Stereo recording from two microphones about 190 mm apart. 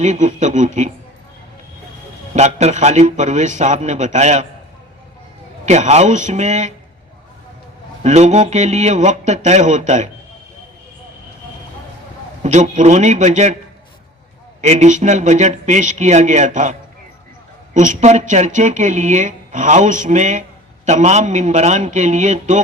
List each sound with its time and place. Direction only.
0.0 s a woman's voice: 40° right (ahead or behind)
2.3 s a woman's voice: 35° right (ahead or behind)
5.6 s a woman's voice: 35° right (ahead or behind)
8.0 s a woman's voice: 35° right (ahead or behind)
12.4 s a woman's voice: 40° right (ahead or behind)
14.6 s a woman's voice: 40° right (ahead or behind)
17.7 s a woman's voice: 40° right (ahead or behind)